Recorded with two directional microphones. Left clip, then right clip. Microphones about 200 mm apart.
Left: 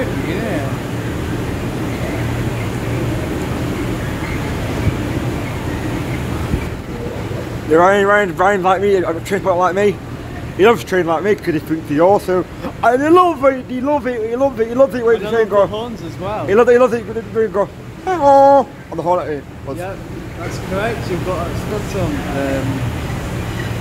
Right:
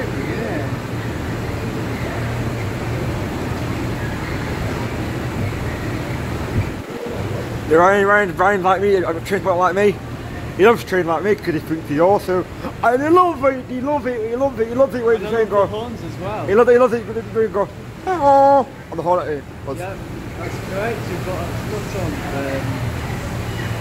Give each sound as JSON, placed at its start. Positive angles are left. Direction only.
{"t": 7.7, "sound": "a man's voice", "side_deg": 5}